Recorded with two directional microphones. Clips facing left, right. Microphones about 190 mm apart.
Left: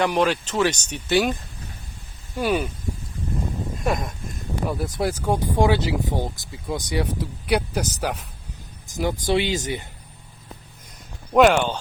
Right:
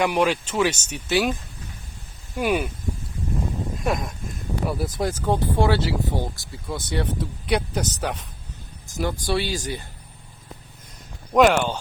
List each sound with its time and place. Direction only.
0.0 s speech: 10° right (ahead or behind)
2.3 s speech: 10° right (ahead or behind)
3.8 s speech: centre (ahead or behind); by 9.8 s 20° left (ahead or behind)
11.3 s speech: 5° right (ahead or behind)